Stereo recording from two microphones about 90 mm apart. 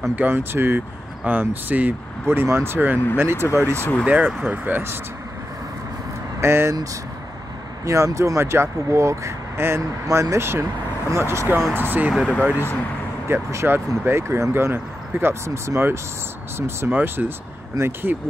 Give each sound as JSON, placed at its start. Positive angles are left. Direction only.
{"t": 0.1, "sound": "speech", "side_deg": -20}
{"t": 4.0, "sound": "speech", "side_deg": -15}
{"t": 6.4, "sound": "speech", "side_deg": -30}